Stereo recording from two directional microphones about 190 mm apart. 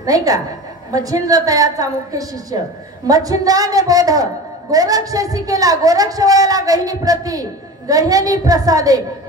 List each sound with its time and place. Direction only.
0.0 s a woman's voice: 20° right (ahead or behind)